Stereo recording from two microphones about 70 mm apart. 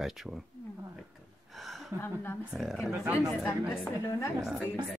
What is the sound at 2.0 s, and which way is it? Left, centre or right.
Speech, left.